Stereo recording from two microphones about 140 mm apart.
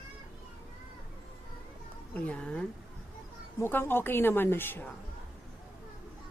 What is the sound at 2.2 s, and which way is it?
A woman's voice, 10° left (ahead or behind).